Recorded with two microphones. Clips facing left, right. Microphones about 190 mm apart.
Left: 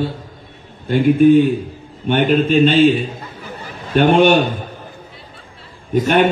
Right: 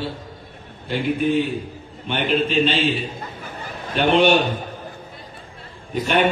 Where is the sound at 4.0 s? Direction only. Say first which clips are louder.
Left 5 dB; 50° left (ahead or behind).